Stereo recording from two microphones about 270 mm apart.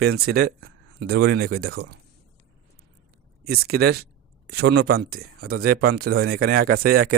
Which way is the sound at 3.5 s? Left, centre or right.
Right.